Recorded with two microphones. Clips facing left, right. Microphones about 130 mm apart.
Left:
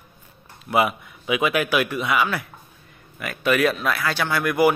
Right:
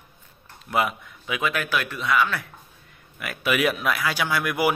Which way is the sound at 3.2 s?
5° right (ahead or behind).